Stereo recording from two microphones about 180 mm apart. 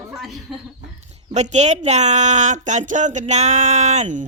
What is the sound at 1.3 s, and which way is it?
Speech, 40° right (ahead or behind).